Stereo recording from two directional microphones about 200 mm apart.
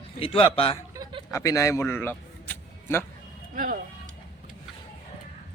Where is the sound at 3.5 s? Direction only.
45° right (ahead or behind).